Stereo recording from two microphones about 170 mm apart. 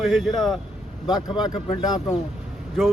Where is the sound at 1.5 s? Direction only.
25° left (ahead or behind).